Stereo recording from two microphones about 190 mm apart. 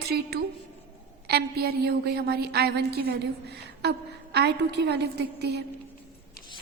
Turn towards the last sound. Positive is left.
turn(degrees=-60)  # may be behind; listen again after turning